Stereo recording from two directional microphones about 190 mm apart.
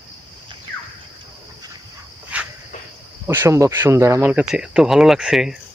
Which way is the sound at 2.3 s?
5° right (ahead or behind).